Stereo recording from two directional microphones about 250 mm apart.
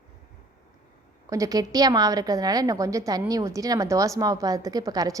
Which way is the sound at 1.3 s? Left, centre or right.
Centre.